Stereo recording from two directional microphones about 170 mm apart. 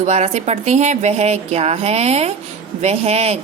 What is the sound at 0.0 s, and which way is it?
A woman's voice, 40° right (ahead or behind).